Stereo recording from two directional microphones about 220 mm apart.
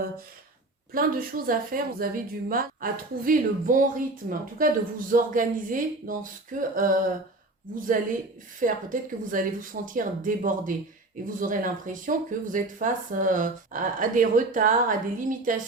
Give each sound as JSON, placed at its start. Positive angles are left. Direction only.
{"t": 0.9, "sound": "speech", "side_deg": -40}